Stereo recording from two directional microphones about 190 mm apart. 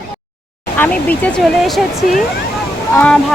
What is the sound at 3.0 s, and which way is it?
Speech, 5° left (ahead or behind).